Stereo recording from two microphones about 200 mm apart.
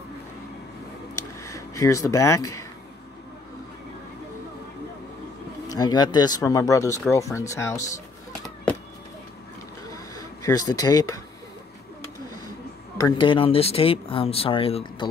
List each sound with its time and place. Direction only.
1.1 s a sound: 15° left (ahead or behind)
5.7 s speech: 20° left (ahead or behind)
10.1 s speech: 15° left (ahead or behind)
12.9 s speech: 20° left (ahead or behind)